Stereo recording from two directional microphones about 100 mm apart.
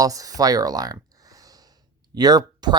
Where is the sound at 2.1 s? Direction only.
45° right (ahead or behind).